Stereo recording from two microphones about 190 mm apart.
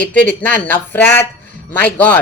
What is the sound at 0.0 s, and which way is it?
Speech, 5° left (ahead or behind).